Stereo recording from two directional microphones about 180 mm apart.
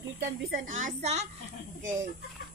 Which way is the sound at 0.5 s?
45° right (ahead or behind).